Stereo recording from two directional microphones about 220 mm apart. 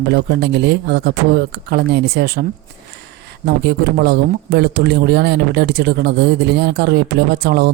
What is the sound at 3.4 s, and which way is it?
Speech, 50° right (ahead or behind).